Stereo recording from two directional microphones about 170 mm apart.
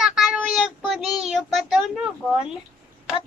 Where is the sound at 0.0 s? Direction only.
5° right (ahead or behind).